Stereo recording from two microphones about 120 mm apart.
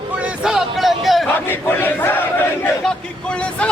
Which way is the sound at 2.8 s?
5° left (ahead or behind).